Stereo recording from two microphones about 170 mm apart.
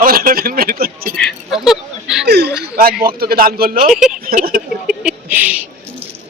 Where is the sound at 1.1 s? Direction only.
Centre (ahead or behind).